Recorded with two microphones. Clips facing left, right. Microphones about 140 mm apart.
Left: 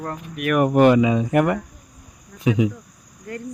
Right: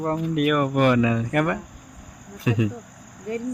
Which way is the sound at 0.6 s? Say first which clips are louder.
Left 9 dB; 25° left (ahead or behind).